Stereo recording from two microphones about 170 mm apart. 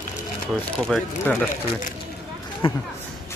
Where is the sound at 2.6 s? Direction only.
30° left (ahead or behind).